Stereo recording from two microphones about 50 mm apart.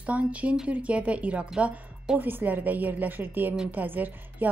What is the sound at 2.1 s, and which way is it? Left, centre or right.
A woman's voice, right.